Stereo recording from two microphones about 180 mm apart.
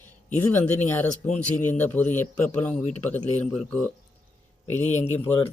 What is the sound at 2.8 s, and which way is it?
Speech, 40° left (ahead or behind).